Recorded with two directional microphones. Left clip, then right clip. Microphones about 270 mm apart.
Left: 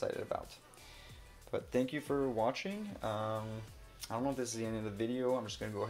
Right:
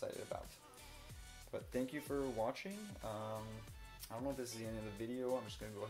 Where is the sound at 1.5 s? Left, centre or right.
Left.